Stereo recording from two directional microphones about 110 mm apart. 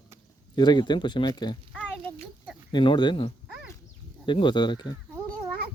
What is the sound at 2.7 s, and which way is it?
Speech, 45° left (ahead or behind).